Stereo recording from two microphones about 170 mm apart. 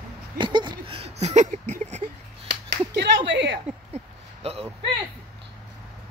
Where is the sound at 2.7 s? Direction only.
85° right.